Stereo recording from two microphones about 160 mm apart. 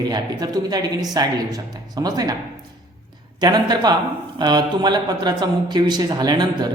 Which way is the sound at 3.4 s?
25° right (ahead or behind).